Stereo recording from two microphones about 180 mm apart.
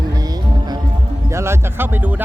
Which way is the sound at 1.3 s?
15° right (ahead or behind).